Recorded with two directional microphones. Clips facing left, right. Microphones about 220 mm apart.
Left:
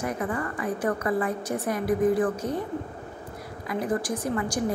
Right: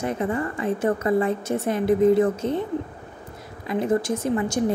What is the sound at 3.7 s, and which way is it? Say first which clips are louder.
Speech: right 5 dB; 25° right (ahead or behind).